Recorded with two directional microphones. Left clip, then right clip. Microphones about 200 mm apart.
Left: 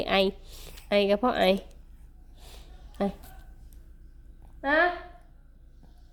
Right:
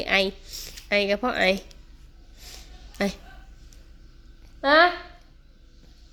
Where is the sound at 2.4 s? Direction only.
15° left (ahead or behind).